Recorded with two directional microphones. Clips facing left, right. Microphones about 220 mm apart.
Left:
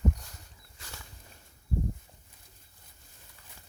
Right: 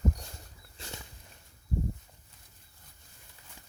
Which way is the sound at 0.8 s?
25° right (ahead or behind).